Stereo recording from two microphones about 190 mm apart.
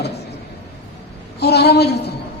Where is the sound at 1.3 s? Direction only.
60° left (ahead or behind).